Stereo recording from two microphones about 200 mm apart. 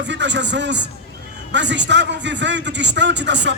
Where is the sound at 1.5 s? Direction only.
60° right (ahead or behind).